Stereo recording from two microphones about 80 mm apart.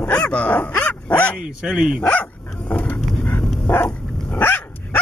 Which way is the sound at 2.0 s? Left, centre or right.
Centre.